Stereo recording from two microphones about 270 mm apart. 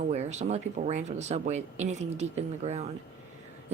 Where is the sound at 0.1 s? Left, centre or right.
Right.